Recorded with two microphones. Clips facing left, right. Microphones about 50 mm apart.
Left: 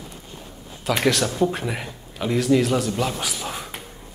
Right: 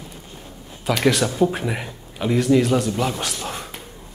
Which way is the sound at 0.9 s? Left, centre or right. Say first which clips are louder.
Right 2 dB; centre.